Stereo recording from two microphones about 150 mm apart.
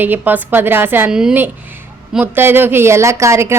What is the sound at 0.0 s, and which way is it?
Speech, 10° right (ahead or behind).